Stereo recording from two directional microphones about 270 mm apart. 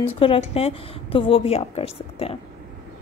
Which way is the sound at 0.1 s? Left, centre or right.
Left.